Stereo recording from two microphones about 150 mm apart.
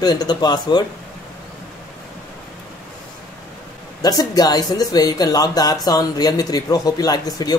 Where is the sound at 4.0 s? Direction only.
25° left (ahead or behind).